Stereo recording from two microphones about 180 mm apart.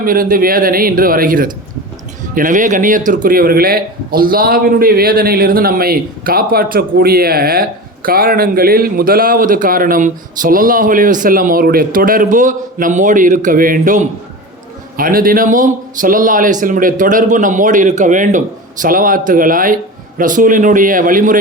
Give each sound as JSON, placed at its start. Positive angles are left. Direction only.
{"t": 0.0, "sound": "a man's voice", "side_deg": -50}